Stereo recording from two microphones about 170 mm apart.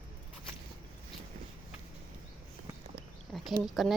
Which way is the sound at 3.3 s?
Centre (ahead or behind).